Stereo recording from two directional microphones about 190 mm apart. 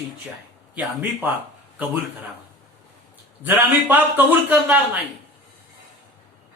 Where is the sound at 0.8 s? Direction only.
10° right (ahead or behind).